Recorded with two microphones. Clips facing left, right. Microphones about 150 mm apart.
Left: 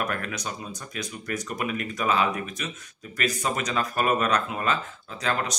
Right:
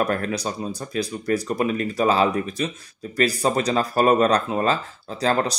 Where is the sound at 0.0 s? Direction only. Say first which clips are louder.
Right 7 dB; 35° right (ahead or behind).